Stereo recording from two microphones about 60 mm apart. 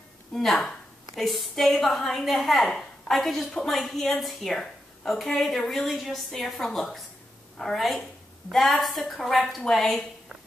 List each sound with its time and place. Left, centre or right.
0.3 s a woman's voice: centre